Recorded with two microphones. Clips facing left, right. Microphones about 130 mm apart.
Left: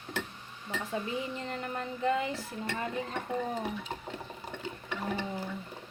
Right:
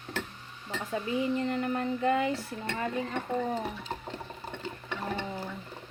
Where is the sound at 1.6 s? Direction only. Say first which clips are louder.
Right 4 dB; 45° right (ahead or behind).